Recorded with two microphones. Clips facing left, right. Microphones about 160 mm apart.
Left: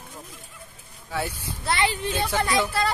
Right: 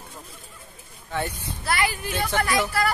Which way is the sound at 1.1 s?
10° left (ahead or behind).